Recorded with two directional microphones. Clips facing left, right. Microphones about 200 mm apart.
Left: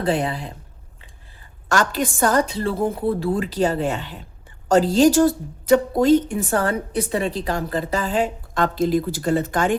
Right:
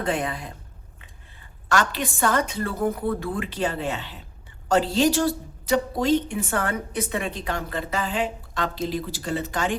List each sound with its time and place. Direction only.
0.0 s a woman's voice: 30° left (ahead or behind)
1.7 s a woman's voice: 45° left (ahead or behind)